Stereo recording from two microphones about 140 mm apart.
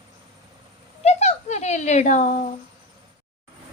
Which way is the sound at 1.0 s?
50° left (ahead or behind).